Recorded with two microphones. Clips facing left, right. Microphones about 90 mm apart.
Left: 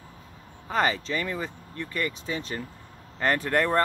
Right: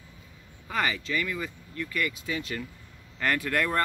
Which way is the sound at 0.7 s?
30° left (ahead or behind).